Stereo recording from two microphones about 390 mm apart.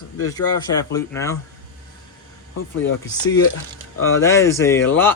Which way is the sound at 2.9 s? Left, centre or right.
Left.